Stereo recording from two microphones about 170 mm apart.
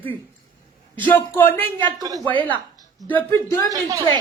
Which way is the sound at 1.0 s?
10° left (ahead or behind).